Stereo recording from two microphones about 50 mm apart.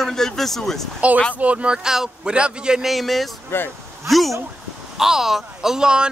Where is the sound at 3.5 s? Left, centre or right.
Left.